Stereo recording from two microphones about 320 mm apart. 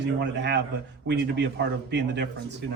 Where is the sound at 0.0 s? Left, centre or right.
Right.